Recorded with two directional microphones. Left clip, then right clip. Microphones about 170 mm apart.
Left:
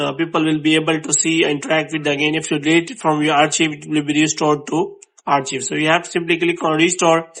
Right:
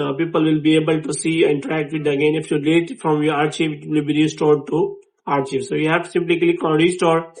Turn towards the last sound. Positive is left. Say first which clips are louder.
# left 2 dB
turn(degrees=25)  # may be behind; listen again after turning